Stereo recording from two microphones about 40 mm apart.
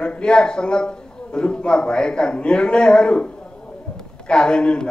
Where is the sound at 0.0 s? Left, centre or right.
Left.